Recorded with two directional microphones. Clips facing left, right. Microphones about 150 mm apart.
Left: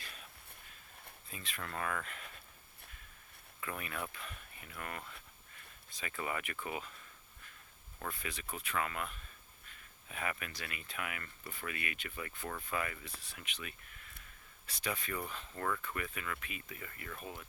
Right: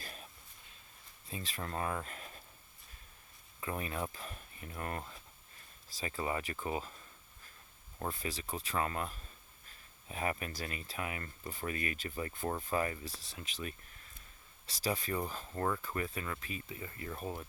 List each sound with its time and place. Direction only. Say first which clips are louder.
0.0 s a sound: right 4 dB; 40° right (ahead or behind)
1.3 s speech: right 4 dB; 30° right (ahead or behind)
3.6 s speech: right 4 dB; 30° right (ahead or behind)
7.9 s speech: right 4 dB; 30° right (ahead or behind)